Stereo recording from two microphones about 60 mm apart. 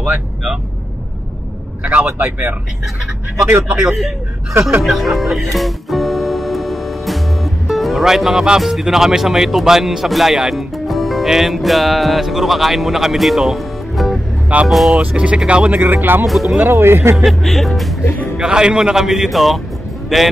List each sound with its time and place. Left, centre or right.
1.8 s a man's voice: right
2.0 s speech: right
4.8 s speech: centre
14.5 s speech: right
15.8 s speech: right
17.2 s speech: centre
18.4 s a man's voice: centre